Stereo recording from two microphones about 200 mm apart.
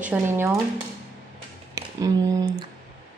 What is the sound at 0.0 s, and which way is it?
Speech, 10° right (ahead or behind).